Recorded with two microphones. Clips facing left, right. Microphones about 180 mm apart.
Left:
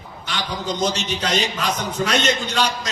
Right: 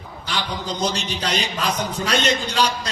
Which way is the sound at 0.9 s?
35° right (ahead or behind).